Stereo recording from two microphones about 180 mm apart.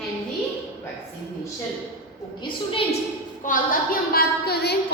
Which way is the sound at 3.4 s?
50° left (ahead or behind).